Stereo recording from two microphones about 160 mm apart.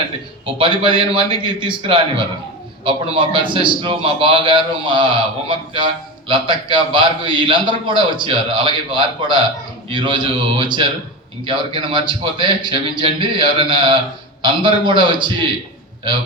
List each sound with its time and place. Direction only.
0.4 s a man's voice: 35° right (ahead or behind)